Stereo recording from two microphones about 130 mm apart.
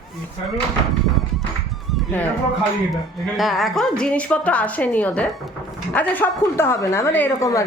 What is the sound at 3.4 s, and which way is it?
A woman's voice, centre (ahead or behind).